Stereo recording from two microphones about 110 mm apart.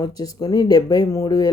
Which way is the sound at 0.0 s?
35° left (ahead or behind).